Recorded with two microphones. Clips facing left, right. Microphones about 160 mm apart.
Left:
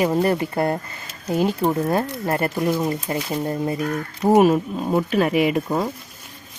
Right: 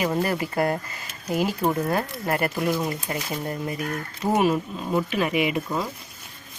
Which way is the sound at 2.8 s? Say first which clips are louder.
Left 5 dB; 25° left (ahead or behind).